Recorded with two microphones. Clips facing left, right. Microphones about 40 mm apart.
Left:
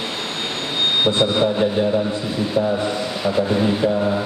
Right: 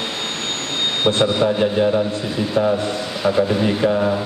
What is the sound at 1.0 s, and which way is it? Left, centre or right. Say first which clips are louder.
Speech: right 3 dB; right.